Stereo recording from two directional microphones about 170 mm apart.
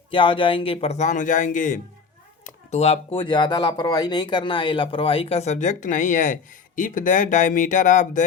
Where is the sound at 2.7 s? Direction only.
40° left (ahead or behind).